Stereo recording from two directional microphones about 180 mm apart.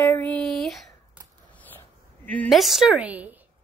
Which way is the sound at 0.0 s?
10° left (ahead or behind).